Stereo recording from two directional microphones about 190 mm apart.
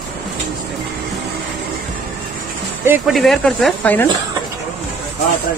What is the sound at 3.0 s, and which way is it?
Speech, centre (ahead or behind).